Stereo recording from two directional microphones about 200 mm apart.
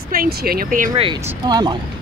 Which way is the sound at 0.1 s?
45° right (ahead or behind).